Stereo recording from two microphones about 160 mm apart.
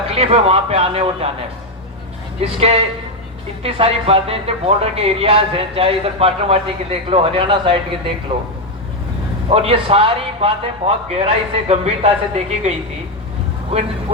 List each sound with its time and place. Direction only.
0.1 s a man's voice: 40° right (ahead or behind)
2.4 s a man's voice: 40° right (ahead or behind)
9.5 s a man's voice: 35° right (ahead or behind)